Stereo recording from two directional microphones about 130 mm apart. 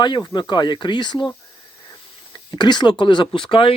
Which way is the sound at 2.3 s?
35° left (ahead or behind).